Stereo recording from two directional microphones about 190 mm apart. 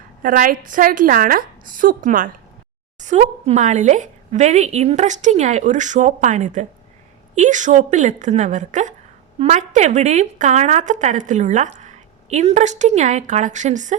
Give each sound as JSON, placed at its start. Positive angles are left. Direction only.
{"t": 0.2, "sound": "a woman's voice", "side_deg": -45}